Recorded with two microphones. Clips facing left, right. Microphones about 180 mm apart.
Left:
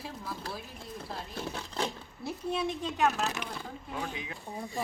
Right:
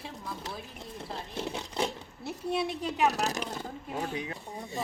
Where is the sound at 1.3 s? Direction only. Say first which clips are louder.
Right 3 dB; 20° right (ahead or behind).